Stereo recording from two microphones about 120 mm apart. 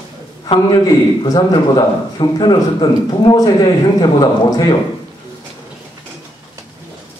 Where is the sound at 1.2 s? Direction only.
40° left (ahead or behind).